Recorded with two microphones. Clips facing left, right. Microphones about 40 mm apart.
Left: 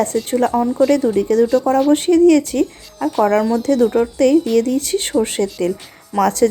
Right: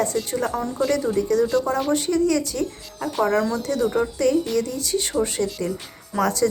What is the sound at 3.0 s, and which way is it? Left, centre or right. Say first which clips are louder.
Speech: left 6 dB; centre.